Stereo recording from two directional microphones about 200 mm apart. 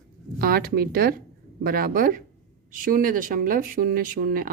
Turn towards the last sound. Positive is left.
turn(degrees=-45)  # may be behind; listen again after turning